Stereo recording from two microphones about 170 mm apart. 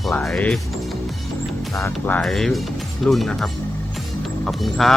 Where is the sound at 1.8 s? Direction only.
10° left (ahead or behind).